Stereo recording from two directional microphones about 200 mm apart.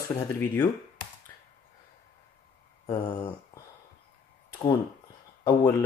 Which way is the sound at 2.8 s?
20° left (ahead or behind).